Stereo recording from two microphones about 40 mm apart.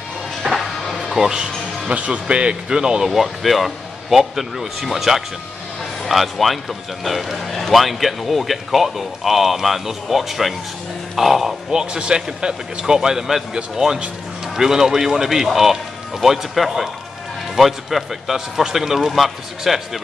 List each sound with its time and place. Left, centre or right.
0.6 s music: centre
1.0 s speech: centre
1.4 s speech: right
2.2 s a man's voice: right
3.1 s speech: centre
11.8 s a man's voice: right; by 20.0 s centre